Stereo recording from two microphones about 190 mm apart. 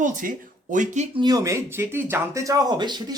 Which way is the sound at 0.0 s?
45° right (ahead or behind).